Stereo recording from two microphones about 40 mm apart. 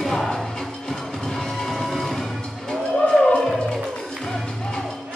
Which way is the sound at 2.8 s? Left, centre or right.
Left.